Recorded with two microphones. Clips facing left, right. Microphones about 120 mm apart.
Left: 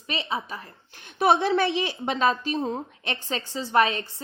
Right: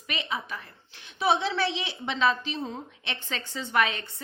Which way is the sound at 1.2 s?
50° left (ahead or behind).